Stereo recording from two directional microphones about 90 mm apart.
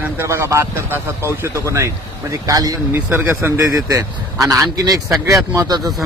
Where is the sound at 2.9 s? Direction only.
25° right (ahead or behind).